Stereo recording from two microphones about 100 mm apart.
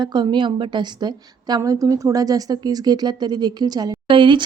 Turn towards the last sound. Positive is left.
turn(degrees=-55)  # may be behind; listen again after turning